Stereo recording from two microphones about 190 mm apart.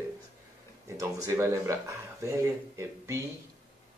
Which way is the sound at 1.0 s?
15° right (ahead or behind).